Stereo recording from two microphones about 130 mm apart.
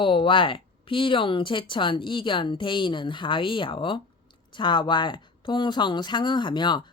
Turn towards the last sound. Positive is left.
turn(degrees=35)  # may be behind; listen again after turning